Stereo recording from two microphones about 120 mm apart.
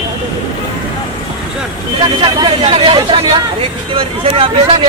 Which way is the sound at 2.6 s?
50° right (ahead or behind).